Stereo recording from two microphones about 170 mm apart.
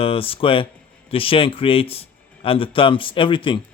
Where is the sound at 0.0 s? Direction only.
35° left (ahead or behind).